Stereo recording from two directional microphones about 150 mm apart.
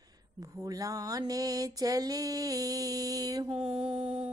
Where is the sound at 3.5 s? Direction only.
40° right (ahead or behind).